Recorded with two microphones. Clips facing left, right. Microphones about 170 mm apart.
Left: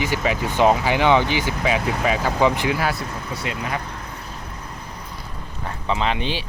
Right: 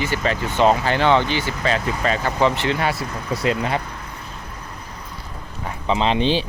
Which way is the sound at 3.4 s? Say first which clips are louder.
Right 7 dB; 30° right (ahead or behind).